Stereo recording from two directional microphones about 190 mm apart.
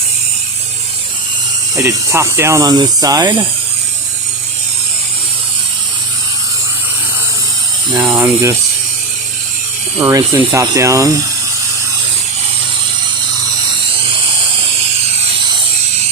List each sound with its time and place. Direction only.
1.7 s speech: 15° right (ahead or behind)
7.9 s speech: 10° right (ahead or behind)
10.0 s speech: 15° right (ahead or behind)